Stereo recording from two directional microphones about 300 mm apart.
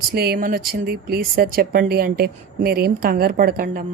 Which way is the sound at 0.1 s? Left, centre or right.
Right.